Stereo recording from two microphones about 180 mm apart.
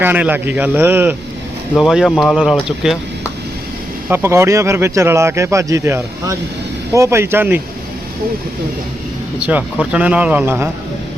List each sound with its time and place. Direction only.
0.0 s speech: 10° right (ahead or behind)
4.1 s speech: 15° right (ahead or behind)
9.4 s speech: 5° right (ahead or behind)